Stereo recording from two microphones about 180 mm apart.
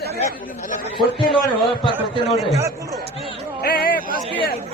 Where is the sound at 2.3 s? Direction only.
Centre (ahead or behind).